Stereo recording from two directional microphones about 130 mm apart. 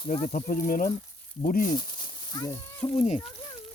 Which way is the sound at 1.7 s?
35° left (ahead or behind).